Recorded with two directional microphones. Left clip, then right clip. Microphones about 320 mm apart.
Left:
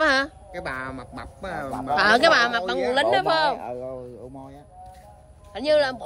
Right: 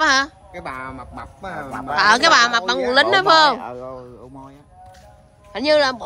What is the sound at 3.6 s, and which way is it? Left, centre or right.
Speech, right.